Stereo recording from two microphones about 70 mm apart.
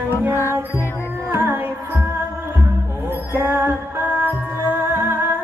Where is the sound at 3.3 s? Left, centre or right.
Right.